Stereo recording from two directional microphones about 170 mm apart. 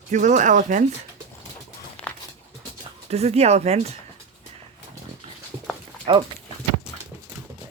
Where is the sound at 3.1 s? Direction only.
40° right (ahead or behind).